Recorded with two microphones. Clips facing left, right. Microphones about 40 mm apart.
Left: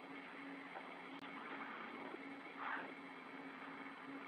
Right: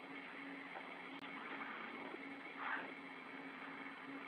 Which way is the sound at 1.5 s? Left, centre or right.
Right.